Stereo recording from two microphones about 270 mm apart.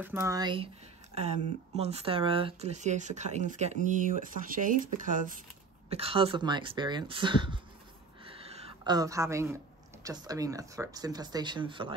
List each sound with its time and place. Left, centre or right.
0.0 s speech: centre
1.8 s speech: right
8.3 s a sound: right
10.0 s speech: centre